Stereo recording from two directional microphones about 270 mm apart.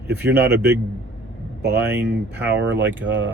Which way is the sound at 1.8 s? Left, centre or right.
Centre.